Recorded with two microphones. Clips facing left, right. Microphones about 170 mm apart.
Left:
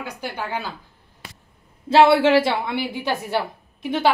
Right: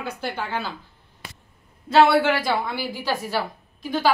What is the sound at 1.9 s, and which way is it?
A woman's voice, 30° left (ahead or behind).